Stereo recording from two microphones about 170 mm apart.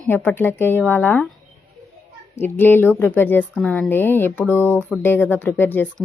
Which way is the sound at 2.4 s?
10° left (ahead or behind).